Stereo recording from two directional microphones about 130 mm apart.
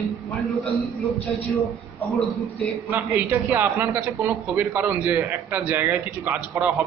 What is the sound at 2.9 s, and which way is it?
A man's voice, 15° right (ahead or behind).